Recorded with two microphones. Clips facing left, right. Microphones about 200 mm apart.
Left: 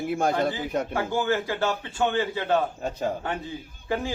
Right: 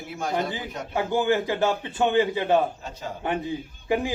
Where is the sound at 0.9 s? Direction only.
20° right (ahead or behind).